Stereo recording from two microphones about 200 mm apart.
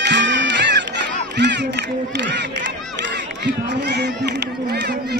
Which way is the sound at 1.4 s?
60° right (ahead or behind).